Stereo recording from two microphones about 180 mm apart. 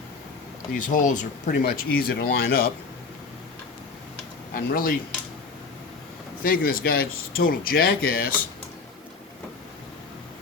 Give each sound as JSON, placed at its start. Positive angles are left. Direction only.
{"t": 0.7, "sound": "speech", "side_deg": 45}
{"t": 4.5, "sound": "speech", "side_deg": 50}
{"t": 6.4, "sound": "speech", "side_deg": 55}